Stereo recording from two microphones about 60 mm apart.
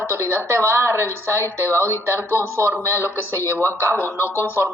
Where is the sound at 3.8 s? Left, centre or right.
Right.